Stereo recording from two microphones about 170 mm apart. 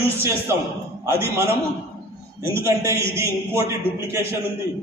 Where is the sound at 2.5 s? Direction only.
15° right (ahead or behind).